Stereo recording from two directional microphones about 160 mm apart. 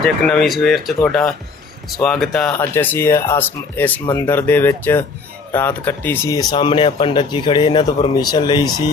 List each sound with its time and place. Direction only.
0.0 s speech: 5° left (ahead or behind); by 8.7 s 25° left (ahead or behind)